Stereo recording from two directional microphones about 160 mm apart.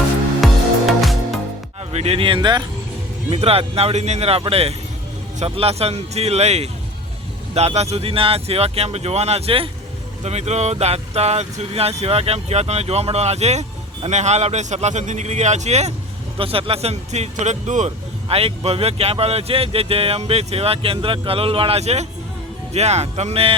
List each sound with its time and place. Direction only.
0.4 s music: centre (ahead or behind)
1.9 s speech: 40° right (ahead or behind)
3.2 s speech: 40° right (ahead or behind)